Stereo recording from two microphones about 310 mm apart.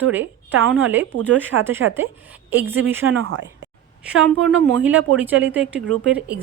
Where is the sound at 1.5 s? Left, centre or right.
Right.